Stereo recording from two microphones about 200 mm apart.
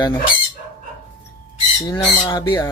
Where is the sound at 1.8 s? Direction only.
20° left (ahead or behind).